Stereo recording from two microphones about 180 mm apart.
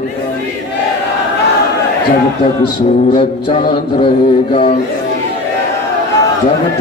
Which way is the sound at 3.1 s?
30° left (ahead or behind).